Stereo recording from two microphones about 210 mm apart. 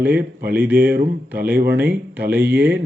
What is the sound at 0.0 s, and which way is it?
Speech, 10° right (ahead or behind).